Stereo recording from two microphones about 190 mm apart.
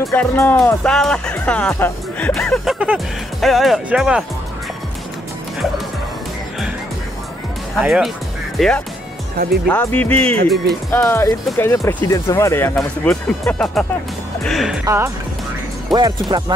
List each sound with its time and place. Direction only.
0.0 s speech: 10° left (ahead or behind)
7.7 s speech: centre (ahead or behind)
10.9 s speech: 15° left (ahead or behind)
14.9 s speech: 15° right (ahead or behind)
15.9 s speech: centre (ahead or behind)
16.3 s speech: 20° right (ahead or behind)